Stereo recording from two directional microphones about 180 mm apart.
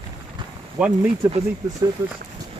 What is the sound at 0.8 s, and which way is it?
Speech, 5° right (ahead or behind).